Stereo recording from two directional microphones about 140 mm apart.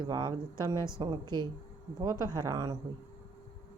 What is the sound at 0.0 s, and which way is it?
Speech, 30° right (ahead or behind).